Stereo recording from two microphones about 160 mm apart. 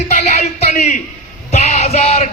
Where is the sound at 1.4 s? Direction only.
45° left (ahead or behind).